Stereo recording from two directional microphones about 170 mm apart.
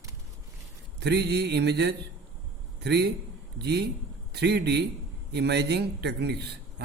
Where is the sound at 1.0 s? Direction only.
75° right (ahead or behind).